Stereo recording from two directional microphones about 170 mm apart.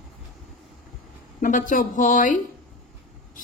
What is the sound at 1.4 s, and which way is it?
Speech, 50° left (ahead or behind).